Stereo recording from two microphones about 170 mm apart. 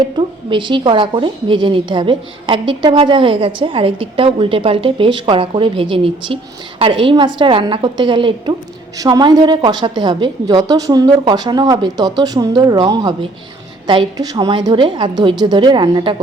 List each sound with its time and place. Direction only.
0.2 s a woman's voice: 30° right (ahead or behind)